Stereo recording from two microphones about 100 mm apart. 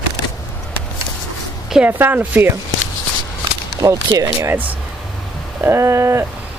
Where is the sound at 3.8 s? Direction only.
35° right (ahead or behind).